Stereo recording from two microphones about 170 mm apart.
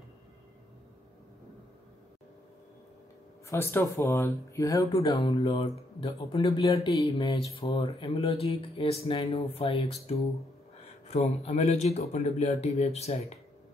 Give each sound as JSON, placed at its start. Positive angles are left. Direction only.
{"t": 3.4, "sound": "speech", "side_deg": 15}
{"t": 5.1, "sound": "speech", "side_deg": 35}